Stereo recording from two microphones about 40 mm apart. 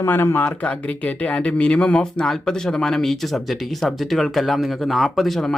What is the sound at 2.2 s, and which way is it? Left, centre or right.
Speech, centre.